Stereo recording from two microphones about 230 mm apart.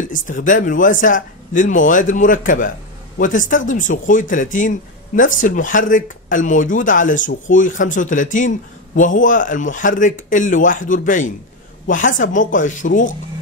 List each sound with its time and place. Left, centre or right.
0.3 s speech: left